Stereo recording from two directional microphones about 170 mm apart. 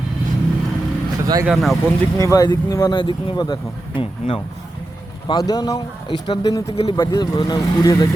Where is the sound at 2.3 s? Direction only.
20° left (ahead or behind).